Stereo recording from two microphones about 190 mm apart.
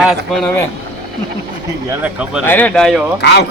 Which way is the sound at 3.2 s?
65° left (ahead or behind).